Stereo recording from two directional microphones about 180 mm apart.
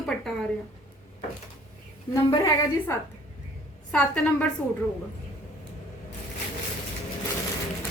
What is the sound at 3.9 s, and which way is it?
Speech, 5° left (ahead or behind).